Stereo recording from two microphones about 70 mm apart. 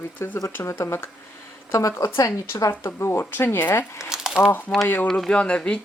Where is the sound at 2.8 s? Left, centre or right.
Left.